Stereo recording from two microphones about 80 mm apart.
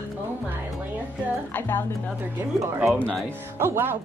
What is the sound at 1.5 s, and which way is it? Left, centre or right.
Speech, left.